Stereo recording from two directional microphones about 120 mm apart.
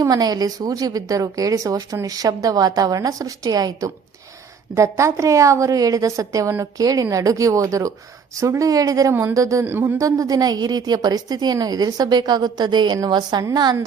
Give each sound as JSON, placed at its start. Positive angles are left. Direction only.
{"t": 0.0, "sound": "a woman's voice", "side_deg": -35}